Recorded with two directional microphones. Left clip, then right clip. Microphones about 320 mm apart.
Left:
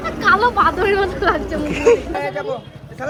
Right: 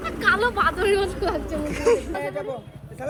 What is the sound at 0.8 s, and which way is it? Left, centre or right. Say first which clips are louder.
Speech: left 6 dB; left.